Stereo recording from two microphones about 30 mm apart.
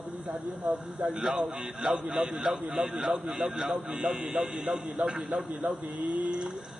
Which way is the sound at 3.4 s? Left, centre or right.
Centre.